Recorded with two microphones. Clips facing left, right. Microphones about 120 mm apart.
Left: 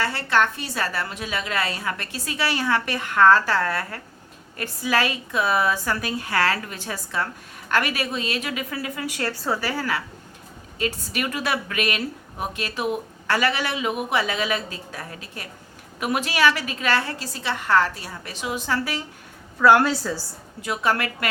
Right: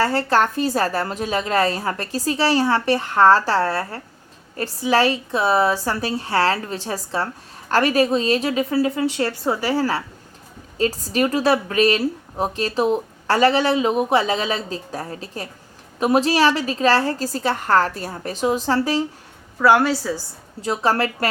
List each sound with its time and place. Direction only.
0.0 s a woman's voice: 40° right (ahead or behind)
19.5 s a woman's voice: 5° right (ahead or behind)
20.6 s a woman's voice: 35° right (ahead or behind)